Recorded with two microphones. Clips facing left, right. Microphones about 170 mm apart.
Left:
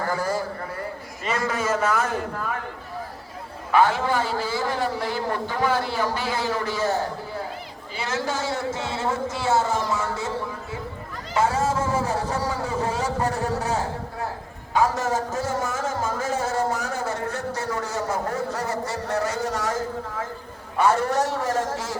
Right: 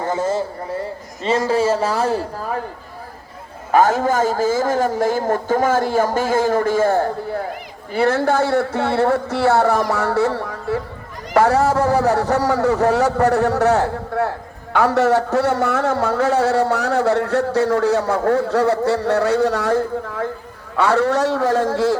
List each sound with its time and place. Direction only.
0.0 s a man's voice: 25° right (ahead or behind)
3.7 s a man's voice: 45° right (ahead or behind); by 21.9 s 65° right (ahead or behind)